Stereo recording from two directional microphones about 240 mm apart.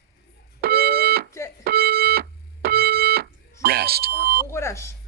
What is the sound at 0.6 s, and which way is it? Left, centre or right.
Fire alarm, right.